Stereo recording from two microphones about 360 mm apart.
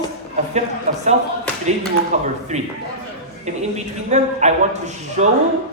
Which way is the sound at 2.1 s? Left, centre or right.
Centre.